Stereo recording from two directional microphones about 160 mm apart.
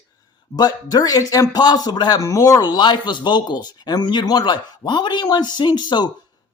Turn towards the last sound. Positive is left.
turn(degrees=30)  # may be behind; listen again after turning